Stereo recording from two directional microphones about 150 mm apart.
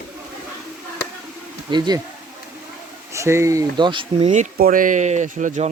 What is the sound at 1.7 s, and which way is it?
Speech, 30° right (ahead or behind).